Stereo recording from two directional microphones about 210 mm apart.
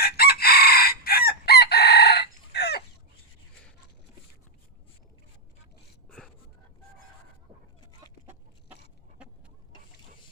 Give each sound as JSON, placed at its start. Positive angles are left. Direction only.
{"t": 0.0, "sound": "chicken", "side_deg": 45}
{"t": 6.1, "sound": "a sound", "side_deg": 5}
{"t": 8.3, "sound": "chicken", "side_deg": -5}